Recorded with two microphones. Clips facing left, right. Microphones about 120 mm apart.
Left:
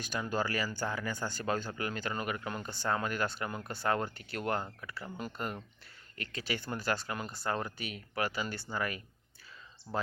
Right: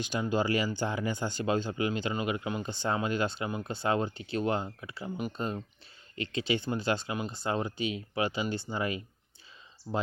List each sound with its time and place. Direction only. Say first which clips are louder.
0.0 s speech: right 5 dB; 20° right (ahead or behind)